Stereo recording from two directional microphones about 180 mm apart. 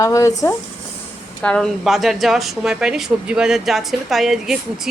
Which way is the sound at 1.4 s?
5° left (ahead or behind).